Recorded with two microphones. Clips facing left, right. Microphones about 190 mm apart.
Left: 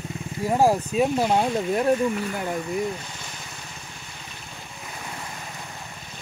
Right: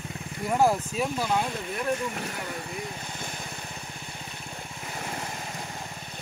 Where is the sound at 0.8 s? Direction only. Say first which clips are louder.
Left 7 dB; 20° left (ahead or behind).